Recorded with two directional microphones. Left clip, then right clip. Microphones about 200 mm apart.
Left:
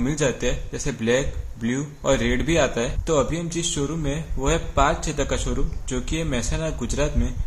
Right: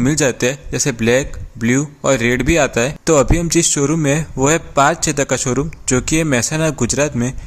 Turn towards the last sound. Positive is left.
turn(degrees=-45)  # may be behind; listen again after turning